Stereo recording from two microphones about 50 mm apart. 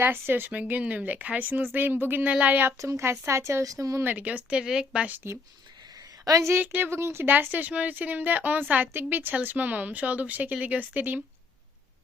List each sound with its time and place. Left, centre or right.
0.0 s speech: right
0.5 s speech: right
2.7 s speech: right
4.0 s speech: right
4.6 s speech: centre
5.2 s speech: right
6.3 s a woman's voice: right
6.6 s speech: right
6.9 s speech: right
7.3 s speech: right